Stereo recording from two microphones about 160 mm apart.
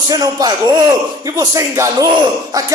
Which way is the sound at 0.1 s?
25° right (ahead or behind).